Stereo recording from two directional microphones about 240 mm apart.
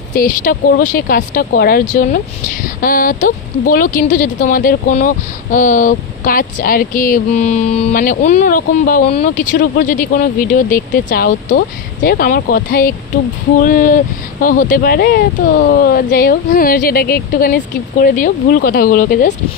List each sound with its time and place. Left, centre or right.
0.1 s speech: left